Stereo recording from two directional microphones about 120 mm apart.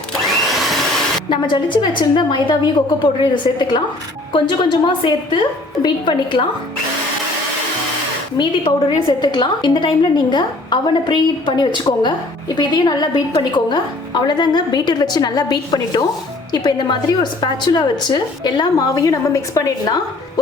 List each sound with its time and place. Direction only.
0.6 s vacuum cleaner: centre (ahead or behind)
1.3 s a woman's voice: 40° left (ahead or behind)
8.4 s a woman's voice: 40° left (ahead or behind)